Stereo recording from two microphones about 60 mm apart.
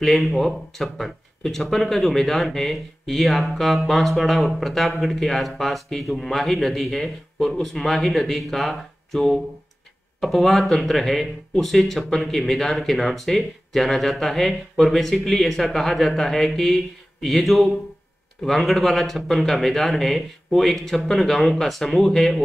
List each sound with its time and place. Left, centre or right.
0.0 s speech: centre